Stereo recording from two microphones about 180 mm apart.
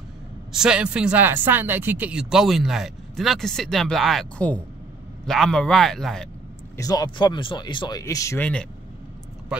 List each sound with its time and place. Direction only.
0.5 s speech: 5° right (ahead or behind)
6.8 s speech: 20° left (ahead or behind)
9.5 s speech: 5° right (ahead or behind)